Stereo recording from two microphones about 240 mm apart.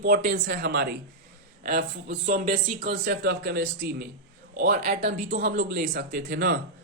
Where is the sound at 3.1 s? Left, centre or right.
Right.